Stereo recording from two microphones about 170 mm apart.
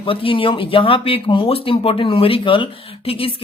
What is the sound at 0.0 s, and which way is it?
Speech, 30° left (ahead or behind).